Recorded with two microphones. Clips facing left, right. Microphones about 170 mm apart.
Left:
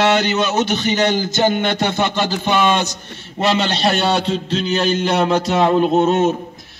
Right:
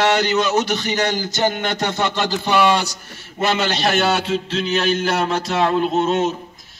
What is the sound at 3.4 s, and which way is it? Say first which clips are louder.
Speech: left 2 dB; 30° left (ahead or behind).